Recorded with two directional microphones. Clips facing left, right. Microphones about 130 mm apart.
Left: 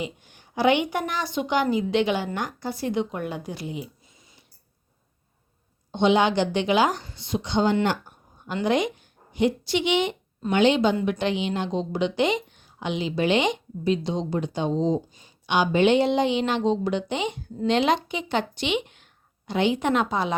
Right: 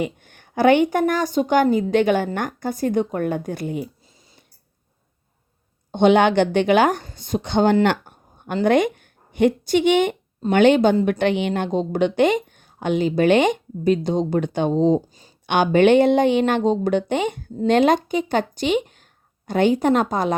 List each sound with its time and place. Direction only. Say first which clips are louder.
0.0 s a woman's voice: right 7 dB; 55° right (ahead or behind)
5.9 s a woman's voice: right 5 dB; 55° right (ahead or behind)